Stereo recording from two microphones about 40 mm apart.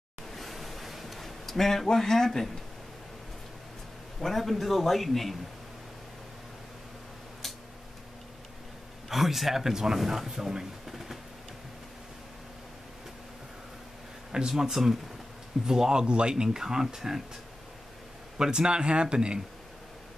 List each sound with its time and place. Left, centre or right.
0.3 s a sound: centre
4.2 s a man's voice: centre
9.1 s a man's voice: centre
14.5 s speech: centre; by 16.4 s right
16.4 s speech: centre
18.4 s speech: right